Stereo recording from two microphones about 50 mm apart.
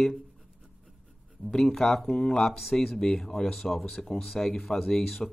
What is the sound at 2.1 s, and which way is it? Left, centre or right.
Speech, centre.